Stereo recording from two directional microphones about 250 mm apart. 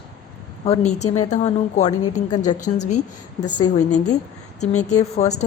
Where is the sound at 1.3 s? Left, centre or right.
Left.